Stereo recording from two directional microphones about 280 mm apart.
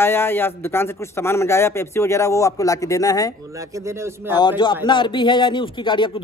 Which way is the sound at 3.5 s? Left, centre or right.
Centre.